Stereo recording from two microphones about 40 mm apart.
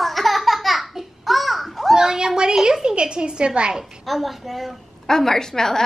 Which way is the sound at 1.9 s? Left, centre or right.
Centre.